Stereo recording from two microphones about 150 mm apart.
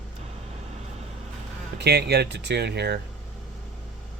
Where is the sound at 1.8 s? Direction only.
90° right.